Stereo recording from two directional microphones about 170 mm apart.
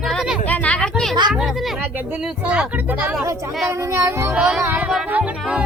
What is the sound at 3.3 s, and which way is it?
Speech, 15° right (ahead or behind).